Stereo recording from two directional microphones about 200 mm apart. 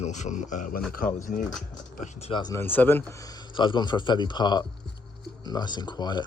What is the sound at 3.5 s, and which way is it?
Speech, 25° left (ahead or behind).